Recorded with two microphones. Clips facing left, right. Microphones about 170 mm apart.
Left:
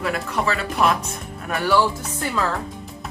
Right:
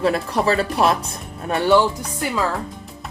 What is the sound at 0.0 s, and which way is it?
Speech, 30° right (ahead or behind).